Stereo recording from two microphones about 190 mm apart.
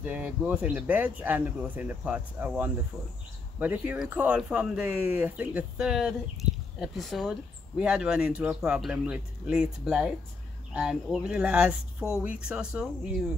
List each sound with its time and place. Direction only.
0.0 s speech: 5° right (ahead or behind)